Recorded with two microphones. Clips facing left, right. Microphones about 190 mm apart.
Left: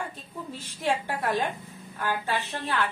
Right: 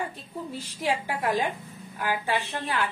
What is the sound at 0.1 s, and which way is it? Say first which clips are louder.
A woman's voice: right 3 dB; 10° right (ahead or behind).